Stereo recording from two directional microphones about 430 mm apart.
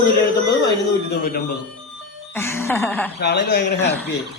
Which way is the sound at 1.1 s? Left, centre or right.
Left.